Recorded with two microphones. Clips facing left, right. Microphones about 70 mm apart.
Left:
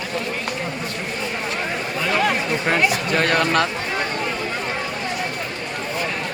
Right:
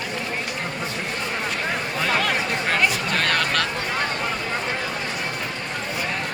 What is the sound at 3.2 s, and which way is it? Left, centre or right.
Speech, centre.